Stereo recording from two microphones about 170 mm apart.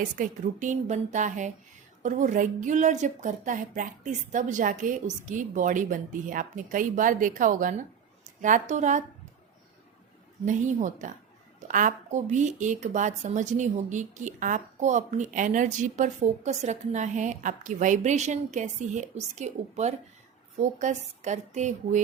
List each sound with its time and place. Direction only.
0.2 s a woman's voice: 45° right (ahead or behind)
10.4 s a woman's voice: 45° right (ahead or behind)